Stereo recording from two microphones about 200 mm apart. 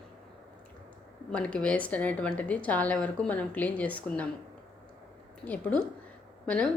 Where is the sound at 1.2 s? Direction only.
5° left (ahead or behind).